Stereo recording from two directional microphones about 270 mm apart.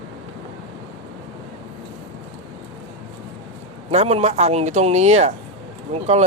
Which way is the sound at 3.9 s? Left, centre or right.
Right.